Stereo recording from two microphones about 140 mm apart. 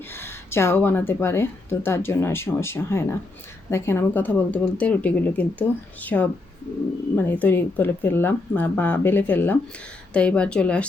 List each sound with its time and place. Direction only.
0.1 s a woman's voice: 15° left (ahead or behind)